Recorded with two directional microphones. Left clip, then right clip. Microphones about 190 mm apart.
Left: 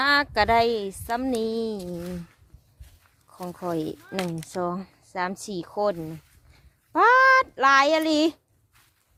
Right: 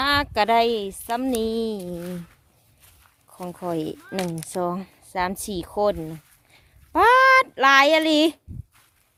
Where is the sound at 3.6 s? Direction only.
10° right (ahead or behind).